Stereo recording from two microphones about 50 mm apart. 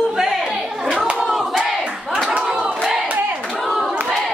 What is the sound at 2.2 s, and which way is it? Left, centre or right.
Crowd, centre.